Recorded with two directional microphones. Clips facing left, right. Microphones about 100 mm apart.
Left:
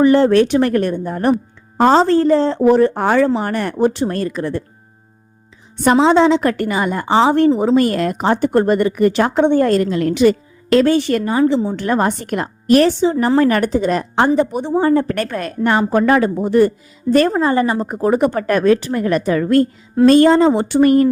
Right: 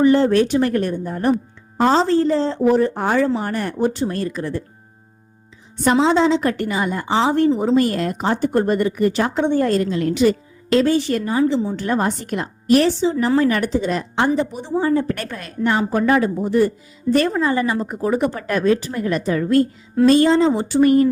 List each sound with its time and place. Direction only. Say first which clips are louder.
0.0 s a woman's voice: left 3 dB; 75° left (ahead or behind)
5.8 s a woman's voice: left 4 dB; 65° left (ahead or behind)
20.1 s a woman's voice: left 4 dB; 55° left (ahead or behind)